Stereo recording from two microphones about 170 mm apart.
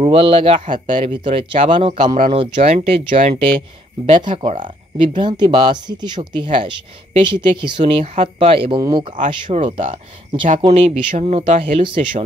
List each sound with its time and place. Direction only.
0.0 s speech: 30° right (ahead or behind)